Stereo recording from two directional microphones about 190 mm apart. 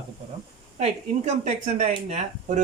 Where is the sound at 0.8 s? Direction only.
35° right (ahead or behind).